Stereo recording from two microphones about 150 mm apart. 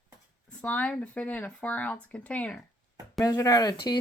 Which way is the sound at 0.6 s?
10° left (ahead or behind).